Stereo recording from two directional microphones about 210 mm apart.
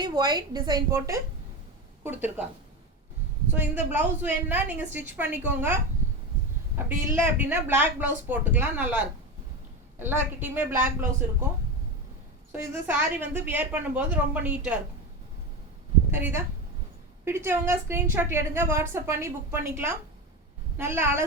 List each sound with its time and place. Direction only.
0.0 s a woman's voice: 20° right (ahead or behind)
3.5 s a woman's voice: 10° right (ahead or behind)
6.8 s a woman's voice: 10° right (ahead or behind)
12.5 s a woman's voice: 10° right (ahead or behind)
16.1 s a woman's voice: 10° right (ahead or behind)